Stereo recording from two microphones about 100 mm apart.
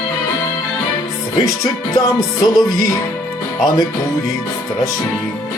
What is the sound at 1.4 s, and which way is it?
Music, 35° left (ahead or behind).